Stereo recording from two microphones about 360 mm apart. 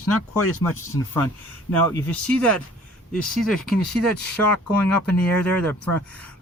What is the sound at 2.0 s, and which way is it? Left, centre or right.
Speech, centre.